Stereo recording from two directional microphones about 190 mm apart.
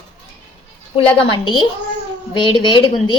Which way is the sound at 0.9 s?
25° left (ahead or behind).